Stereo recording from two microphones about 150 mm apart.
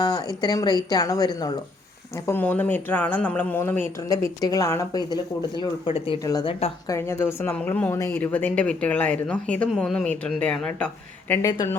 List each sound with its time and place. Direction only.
0.0 s speech: 25° left (ahead or behind)
2.2 s a woman's voice: 15° left (ahead or behind); by 6.7 s 35° left (ahead or behind)
6.8 s a woman's voice: 20° left (ahead or behind)
11.4 s speech: 20° left (ahead or behind)